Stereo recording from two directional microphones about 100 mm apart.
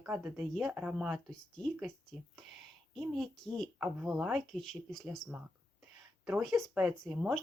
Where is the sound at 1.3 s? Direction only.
5° left (ahead or behind).